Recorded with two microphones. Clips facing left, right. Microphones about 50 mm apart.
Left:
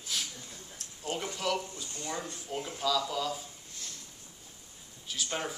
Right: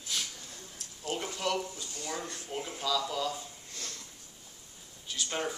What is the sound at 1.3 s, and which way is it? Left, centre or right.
Speech, centre.